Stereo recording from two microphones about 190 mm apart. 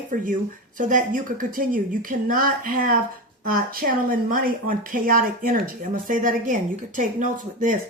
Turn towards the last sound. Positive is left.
turn(degrees=-45)  # may be behind; listen again after turning